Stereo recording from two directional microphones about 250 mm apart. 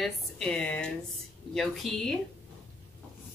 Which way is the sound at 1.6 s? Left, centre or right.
Centre.